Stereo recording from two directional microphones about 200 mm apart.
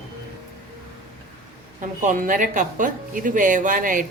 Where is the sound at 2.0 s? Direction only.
40° right (ahead or behind).